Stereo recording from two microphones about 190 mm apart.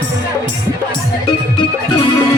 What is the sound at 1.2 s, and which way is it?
Music, 25° left (ahead or behind).